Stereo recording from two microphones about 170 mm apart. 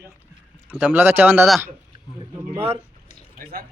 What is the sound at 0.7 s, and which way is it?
Speech, 10° right (ahead or behind).